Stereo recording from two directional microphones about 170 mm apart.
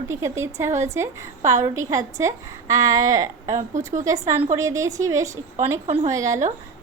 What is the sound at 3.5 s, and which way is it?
Speech, 45° right (ahead or behind).